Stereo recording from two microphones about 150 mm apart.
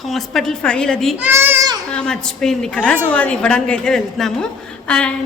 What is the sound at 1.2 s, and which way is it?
Child singing, 15° right (ahead or behind).